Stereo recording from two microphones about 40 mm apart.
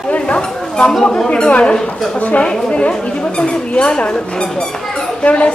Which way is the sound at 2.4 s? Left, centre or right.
Left.